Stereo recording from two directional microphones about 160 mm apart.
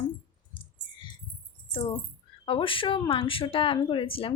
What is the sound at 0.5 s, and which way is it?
Clicking, 35° left (ahead or behind).